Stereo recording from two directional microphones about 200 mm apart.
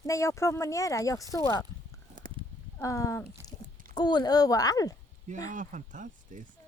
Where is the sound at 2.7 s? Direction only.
15° left (ahead or behind).